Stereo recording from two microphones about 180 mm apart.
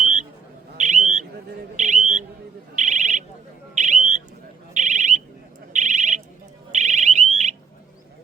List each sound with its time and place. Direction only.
0.8 s bird: 40° right (ahead or behind)
2.7 s a sound: 45° right (ahead or behind)
6.7 s alarm: 40° right (ahead or behind)